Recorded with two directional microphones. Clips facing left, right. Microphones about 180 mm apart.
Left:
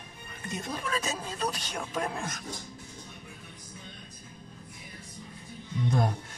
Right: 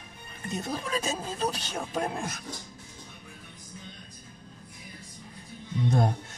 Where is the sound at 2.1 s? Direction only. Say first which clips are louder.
Right 2 dB; 10° right (ahead or behind).